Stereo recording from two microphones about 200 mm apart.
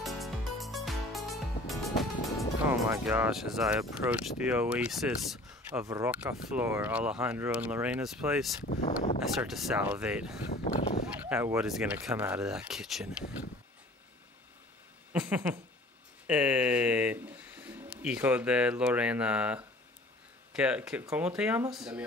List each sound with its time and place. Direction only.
0.0 s music: centre (ahead or behind)
2.9 s speech: 10° right (ahead or behind)
8.6 s a sound: 35° left (ahead or behind)
9.2 s speech: centre (ahead or behind)
15.1 s speech: 10° right (ahead or behind)